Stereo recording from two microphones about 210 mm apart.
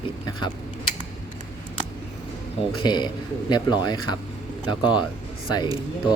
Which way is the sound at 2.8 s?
20° left (ahead or behind).